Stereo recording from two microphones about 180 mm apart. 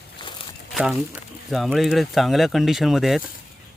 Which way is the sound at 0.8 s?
5° right (ahead or behind).